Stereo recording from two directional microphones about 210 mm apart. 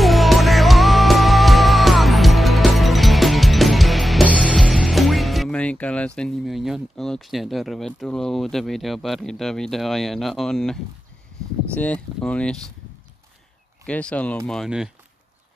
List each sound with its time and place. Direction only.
0.0 s music: centre (ahead or behind)
4.5 s speech: centre (ahead or behind)
13.8 s speech: 5° left (ahead or behind)